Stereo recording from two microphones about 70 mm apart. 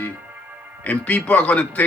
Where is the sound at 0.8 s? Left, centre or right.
Left.